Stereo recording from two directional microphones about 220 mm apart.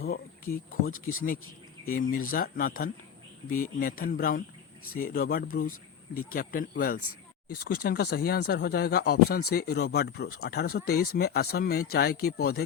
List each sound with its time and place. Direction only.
0.0 s speech: 40° left (ahead or behind)
1.9 s speech: 40° left (ahead or behind)